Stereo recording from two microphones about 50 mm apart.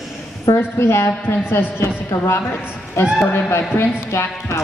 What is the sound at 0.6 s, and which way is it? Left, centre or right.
A woman's voice, left.